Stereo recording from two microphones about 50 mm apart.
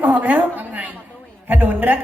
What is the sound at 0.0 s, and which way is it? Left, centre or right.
A woman's voice, right.